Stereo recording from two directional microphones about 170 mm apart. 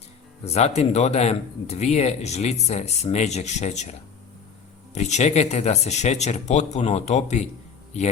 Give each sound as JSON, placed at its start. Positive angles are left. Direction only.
{"t": 0.4, "sound": "speech", "side_deg": 40}
{"t": 4.9, "sound": "speech", "side_deg": 45}